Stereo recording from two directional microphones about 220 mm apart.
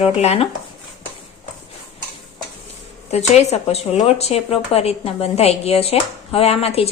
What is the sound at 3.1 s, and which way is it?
Speech, 30° left (ahead or behind).